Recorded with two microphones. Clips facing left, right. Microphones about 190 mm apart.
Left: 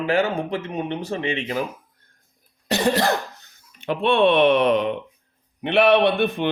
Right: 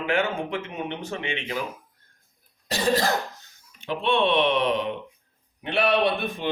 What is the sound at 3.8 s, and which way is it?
A man's voice, 55° left (ahead or behind).